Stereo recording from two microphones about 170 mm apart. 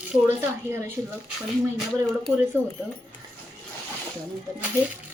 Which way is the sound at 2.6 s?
15° right (ahead or behind).